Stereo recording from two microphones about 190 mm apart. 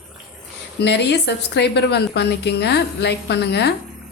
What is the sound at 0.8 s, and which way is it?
A woman's voice, 60° left (ahead or behind).